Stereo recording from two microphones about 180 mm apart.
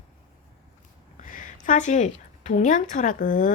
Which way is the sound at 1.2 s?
45° left (ahead or behind).